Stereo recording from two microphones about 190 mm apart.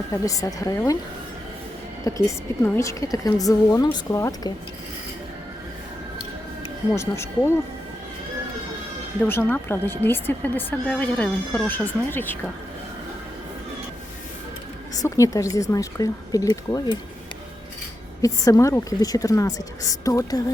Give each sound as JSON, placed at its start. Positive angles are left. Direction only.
{"t": 0.1, "sound": "a woman's voice", "side_deg": 15}
{"t": 2.0, "sound": "a woman's voice", "side_deg": 15}
{"t": 6.9, "sound": "a woman's voice", "side_deg": 15}
{"t": 9.2, "sound": "a woman's voice", "side_deg": 10}
{"t": 14.9, "sound": "a woman's voice", "side_deg": 15}
{"t": 18.2, "sound": "a woman's voice", "side_deg": 15}